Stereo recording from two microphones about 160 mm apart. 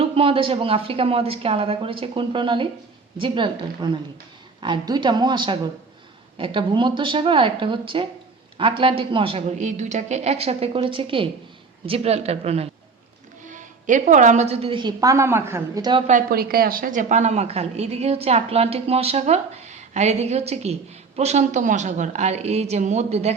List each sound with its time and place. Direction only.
0.0 s a woman's voice: 35° right (ahead or behind); by 15.8 s 15° right (ahead or behind)
15.8 s a woman's voice: 30° right (ahead or behind)
16.0 s a woman's voice: 60° right (ahead or behind); by 23.3 s 45° right (ahead or behind)